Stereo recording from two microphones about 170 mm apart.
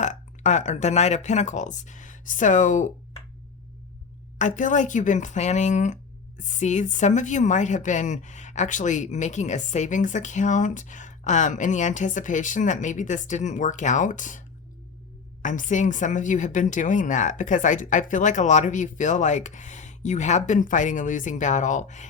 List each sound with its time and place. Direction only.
0.0 s speech: 45° left (ahead or behind)
4.4 s speech: 45° left (ahead or behind)